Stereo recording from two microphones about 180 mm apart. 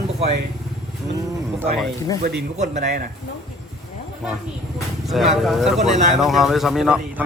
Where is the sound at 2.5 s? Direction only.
40° right (ahead or behind).